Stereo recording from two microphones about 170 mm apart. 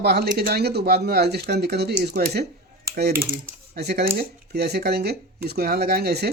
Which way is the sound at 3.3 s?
70° right (ahead or behind).